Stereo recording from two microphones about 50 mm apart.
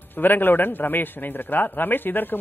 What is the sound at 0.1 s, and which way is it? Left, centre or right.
A man's voice, left.